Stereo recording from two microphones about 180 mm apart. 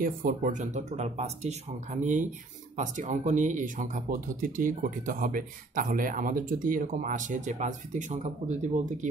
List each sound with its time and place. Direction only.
0.0 s speech: 50° right (ahead or behind)